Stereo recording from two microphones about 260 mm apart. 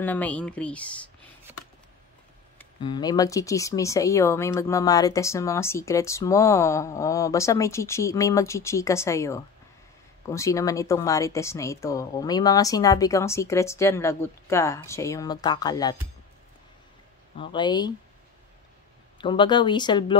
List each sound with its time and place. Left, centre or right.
0.0 s speech: centre
2.8 s speech: centre
17.4 s speech: centre
19.1 s speech: centre